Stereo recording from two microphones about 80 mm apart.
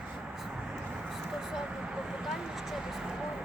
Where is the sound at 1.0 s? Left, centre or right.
Centre.